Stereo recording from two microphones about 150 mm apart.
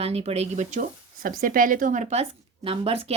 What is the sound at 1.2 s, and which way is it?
A woman's voice, 70° right (ahead or behind).